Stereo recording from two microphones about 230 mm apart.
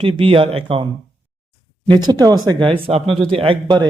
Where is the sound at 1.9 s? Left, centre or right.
Centre.